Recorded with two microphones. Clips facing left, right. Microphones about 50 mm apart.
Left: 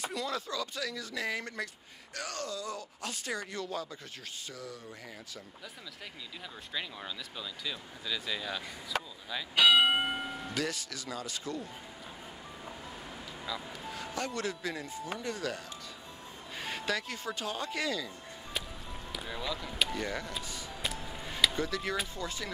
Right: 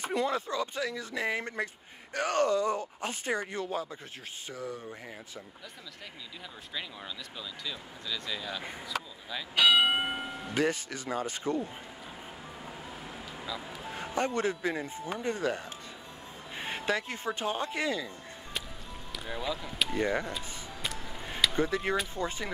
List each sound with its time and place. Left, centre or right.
0.0 s speech: right
2.1 s speech: right
6.7 s speech: centre
10.5 s speech: right
13.4 s honk: centre
13.9 s speech: right
19.2 s speech: centre
20.0 s speech: right
20.8 s music: centre
21.5 s speech: right